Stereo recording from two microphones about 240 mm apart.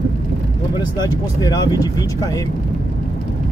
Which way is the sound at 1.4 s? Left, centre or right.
Centre.